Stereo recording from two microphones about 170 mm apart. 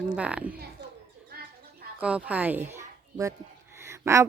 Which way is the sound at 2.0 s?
5° right (ahead or behind).